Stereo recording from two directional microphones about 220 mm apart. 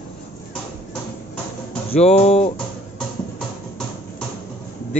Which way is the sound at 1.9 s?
30° left (ahead or behind).